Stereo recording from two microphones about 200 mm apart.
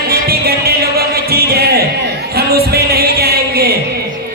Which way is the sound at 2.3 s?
50° right (ahead or behind).